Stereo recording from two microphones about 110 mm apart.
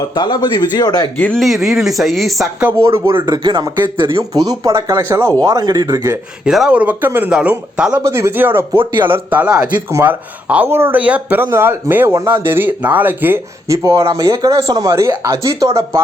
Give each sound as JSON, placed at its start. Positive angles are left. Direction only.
{"t": 0.1, "sound": "speech", "side_deg": 40}
{"t": 1.4, "sound": "speech", "side_deg": 0}
{"t": 2.8, "sound": "speech", "side_deg": -25}
{"t": 3.3, "sound": "speech", "side_deg": -40}
{"t": 4.2, "sound": "speech", "side_deg": -30}
{"t": 5.4, "sound": "speech", "side_deg": -35}
{"t": 6.4, "sound": "speech", "side_deg": -5}
{"t": 8.0, "sound": "speech", "side_deg": -30}
{"t": 8.8, "sound": "speech", "side_deg": -45}
{"t": 9.0, "sound": "speech", "side_deg": -20}
{"t": 13.7, "sound": "speech", "side_deg": -30}